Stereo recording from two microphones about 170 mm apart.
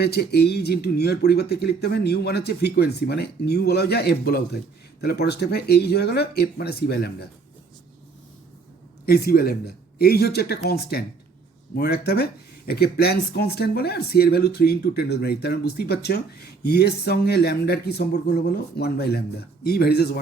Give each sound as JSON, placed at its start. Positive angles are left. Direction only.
{"t": 0.0, "sound": "speech", "side_deg": 70}
{"t": 9.0, "sound": "a man's voice", "side_deg": 65}